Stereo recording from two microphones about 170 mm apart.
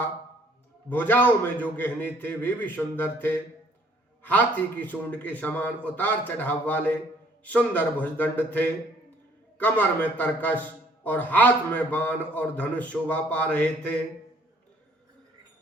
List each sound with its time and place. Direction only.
0.9 s a man's voice: 10° left (ahead or behind)